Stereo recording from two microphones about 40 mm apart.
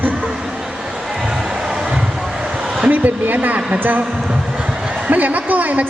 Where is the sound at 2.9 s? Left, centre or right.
Right.